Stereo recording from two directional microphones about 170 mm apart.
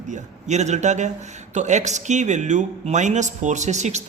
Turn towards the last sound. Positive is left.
turn(degrees=-45)  # may be behind; listen again after turning